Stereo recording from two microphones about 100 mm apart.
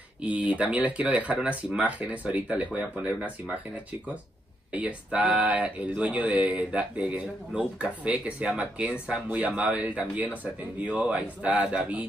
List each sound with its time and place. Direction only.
0.2 s speech: 15° right (ahead or behind)
4.7 s speech: 15° right (ahead or behind)